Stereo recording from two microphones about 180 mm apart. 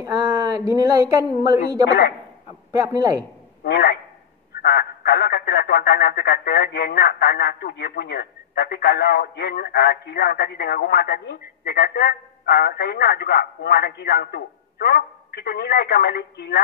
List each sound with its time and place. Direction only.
0.6 s speech: 20° right (ahead or behind)
3.6 s speech: 65° left (ahead or behind)